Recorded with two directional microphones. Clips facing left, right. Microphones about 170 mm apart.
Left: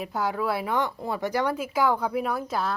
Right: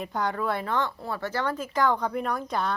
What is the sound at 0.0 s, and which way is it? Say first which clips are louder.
Speech: left 1 dB; 5° left (ahead or behind).